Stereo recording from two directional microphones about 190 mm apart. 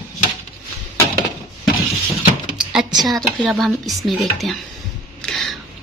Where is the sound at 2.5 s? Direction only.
5° right (ahead or behind).